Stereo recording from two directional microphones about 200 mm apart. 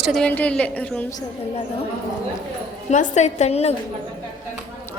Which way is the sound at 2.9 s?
35° left (ahead or behind).